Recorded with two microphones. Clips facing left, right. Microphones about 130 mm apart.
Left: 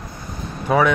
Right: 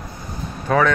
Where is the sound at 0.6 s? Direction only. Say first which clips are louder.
Left 1 dB; 10° left (ahead or behind).